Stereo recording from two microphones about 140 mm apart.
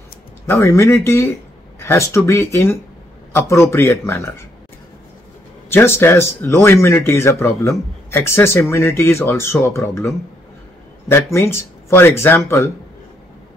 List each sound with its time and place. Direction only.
0.5 s speech: 20° left (ahead or behind)
5.7 s speech: 15° left (ahead or behind)